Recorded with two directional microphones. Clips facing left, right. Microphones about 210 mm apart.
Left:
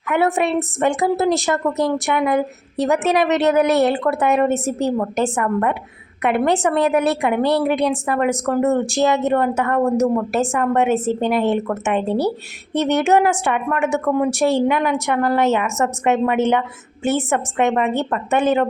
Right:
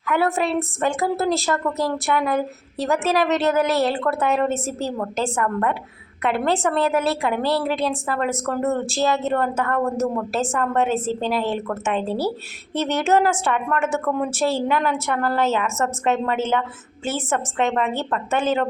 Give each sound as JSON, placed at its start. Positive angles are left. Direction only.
{"t": 0.0, "sound": "a woman's voice", "side_deg": 20}